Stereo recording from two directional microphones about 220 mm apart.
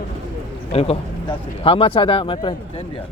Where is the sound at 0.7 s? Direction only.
25° left (ahead or behind).